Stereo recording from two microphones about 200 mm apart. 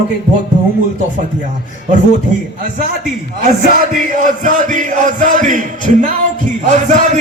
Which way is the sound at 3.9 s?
40° right (ahead or behind).